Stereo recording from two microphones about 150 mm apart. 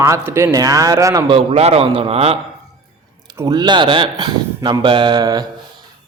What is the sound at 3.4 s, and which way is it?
A man's voice, 25° right (ahead or behind).